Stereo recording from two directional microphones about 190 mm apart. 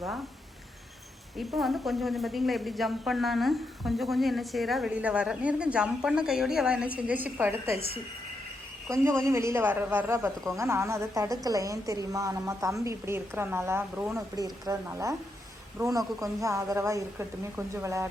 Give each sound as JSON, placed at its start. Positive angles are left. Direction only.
{"t": 1.5, "sound": "speech", "side_deg": 0}
{"t": 8.9, "sound": "a woman's voice", "side_deg": -15}
{"t": 14.3, "sound": "a woman's voice", "side_deg": -20}